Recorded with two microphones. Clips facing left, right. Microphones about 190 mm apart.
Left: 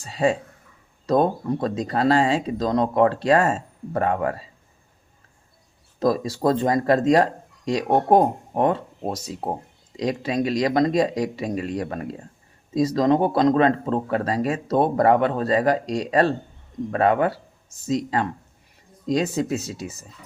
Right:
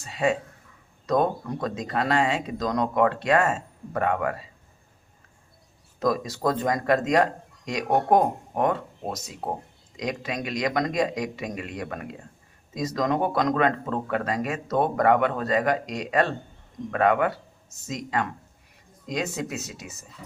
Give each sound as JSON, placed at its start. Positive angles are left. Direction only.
{"t": 0.0, "sound": "speech", "side_deg": 35}
{"t": 6.0, "sound": "speech", "side_deg": 30}